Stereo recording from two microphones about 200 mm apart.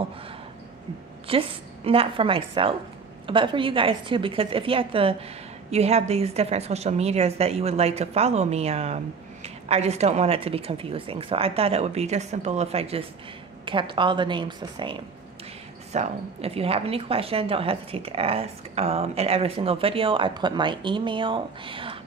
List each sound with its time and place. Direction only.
1.3 s a woman's voice: 25° right (ahead or behind)